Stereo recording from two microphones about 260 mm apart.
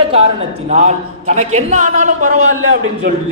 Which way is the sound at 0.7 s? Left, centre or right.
Right.